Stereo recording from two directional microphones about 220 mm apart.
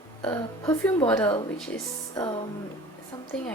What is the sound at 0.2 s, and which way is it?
A woman's voice, 10° left (ahead or behind).